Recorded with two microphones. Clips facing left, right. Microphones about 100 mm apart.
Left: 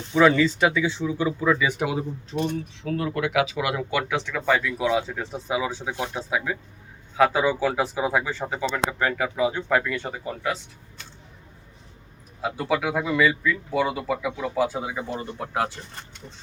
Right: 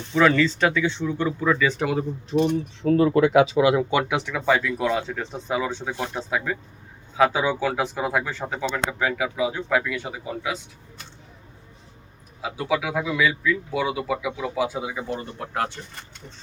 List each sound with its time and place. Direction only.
0.1 s speech: 15° left (ahead or behind)
2.3 s speech: 15° right (ahead or behind)
2.8 s speech: 35° right (ahead or behind); by 10.6 s 5° right (ahead or behind)
12.4 s speech: centre (ahead or behind)